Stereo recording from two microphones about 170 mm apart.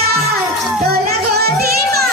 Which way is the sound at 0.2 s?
Centre (ahead or behind).